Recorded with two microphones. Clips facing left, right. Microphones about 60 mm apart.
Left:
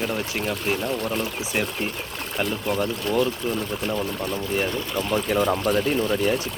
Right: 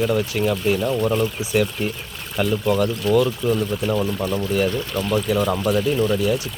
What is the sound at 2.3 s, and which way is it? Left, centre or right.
Speech, left.